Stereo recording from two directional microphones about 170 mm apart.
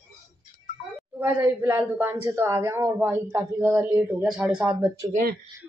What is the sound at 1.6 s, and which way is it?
Speech, 15° right (ahead or behind).